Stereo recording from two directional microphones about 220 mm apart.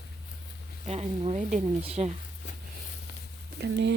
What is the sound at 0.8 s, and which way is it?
Speech, 30° right (ahead or behind).